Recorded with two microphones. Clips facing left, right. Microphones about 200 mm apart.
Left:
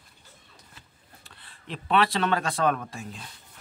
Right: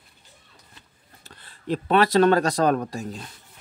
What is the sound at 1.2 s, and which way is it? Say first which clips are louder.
Speech: right 13 dB; 40° right (ahead or behind).